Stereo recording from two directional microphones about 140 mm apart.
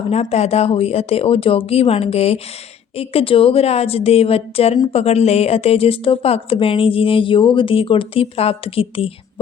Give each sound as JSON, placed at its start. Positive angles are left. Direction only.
{"t": 0.1, "sound": "speech", "side_deg": 50}